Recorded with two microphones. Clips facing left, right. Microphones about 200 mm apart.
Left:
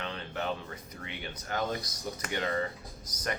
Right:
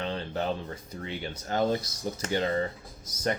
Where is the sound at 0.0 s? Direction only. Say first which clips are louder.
Right 5 dB; 35° right (ahead or behind).